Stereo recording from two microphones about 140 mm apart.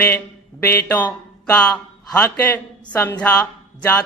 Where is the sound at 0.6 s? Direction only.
15° left (ahead or behind).